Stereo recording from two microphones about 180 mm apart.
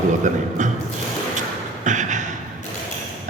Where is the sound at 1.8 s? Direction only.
45° right (ahead or behind).